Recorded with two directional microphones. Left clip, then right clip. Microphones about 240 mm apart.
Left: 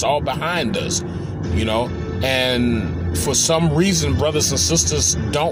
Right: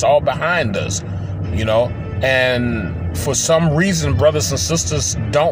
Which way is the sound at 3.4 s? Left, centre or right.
Right.